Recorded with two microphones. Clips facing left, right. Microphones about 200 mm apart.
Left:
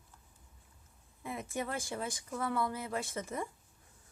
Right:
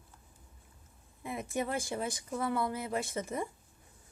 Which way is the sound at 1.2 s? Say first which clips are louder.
Right 3 dB; 15° right (ahead or behind).